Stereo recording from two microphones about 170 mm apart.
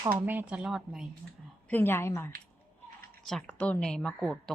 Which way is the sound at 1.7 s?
10° left (ahead or behind).